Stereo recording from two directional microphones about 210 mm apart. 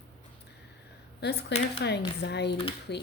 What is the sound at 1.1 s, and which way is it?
Speech, 55° left (ahead or behind).